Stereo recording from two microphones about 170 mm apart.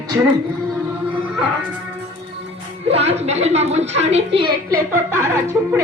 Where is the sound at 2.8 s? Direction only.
35° right (ahead or behind).